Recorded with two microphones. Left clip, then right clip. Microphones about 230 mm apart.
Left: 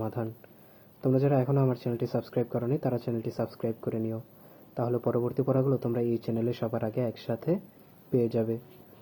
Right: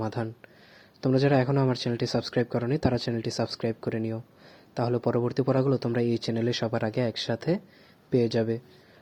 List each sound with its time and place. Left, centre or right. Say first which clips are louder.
0.0 s speech: right 2 dB; right
8.1 s speech: right 2 dB; right